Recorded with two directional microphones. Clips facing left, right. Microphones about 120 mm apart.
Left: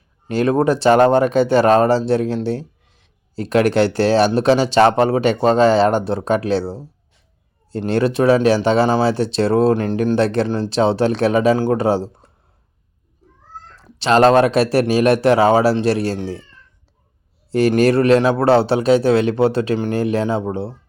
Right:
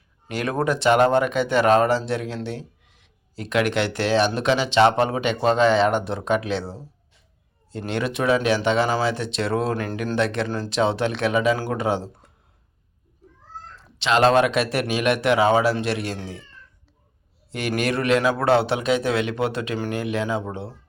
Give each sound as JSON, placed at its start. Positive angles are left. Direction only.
{"t": 0.3, "sound": "speech", "side_deg": 30}
{"t": 14.0, "sound": "speech", "side_deg": 40}
{"t": 17.5, "sound": "speech", "side_deg": 35}